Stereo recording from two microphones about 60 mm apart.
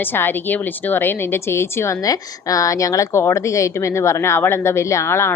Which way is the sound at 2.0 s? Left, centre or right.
Left.